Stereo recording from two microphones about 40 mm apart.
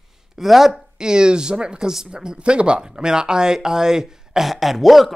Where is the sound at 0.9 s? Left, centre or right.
Centre.